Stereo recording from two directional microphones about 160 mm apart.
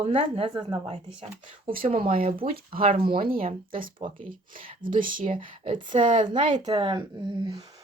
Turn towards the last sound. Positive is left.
turn(degrees=-25)  # may be behind; listen again after turning